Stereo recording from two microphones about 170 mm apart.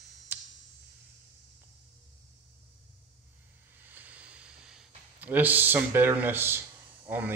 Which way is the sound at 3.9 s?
10° right (ahead or behind).